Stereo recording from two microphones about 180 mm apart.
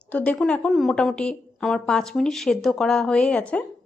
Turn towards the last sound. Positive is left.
turn(degrees=5)  # may be behind; listen again after turning